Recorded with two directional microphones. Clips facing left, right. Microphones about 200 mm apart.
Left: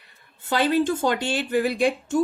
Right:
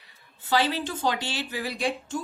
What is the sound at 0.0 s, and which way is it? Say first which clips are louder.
A woman's voice: left 1 dB; 55° left (ahead or behind).